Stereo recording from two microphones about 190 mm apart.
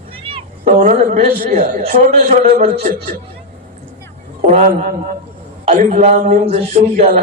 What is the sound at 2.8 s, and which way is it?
Speech, 45° right (ahead or behind).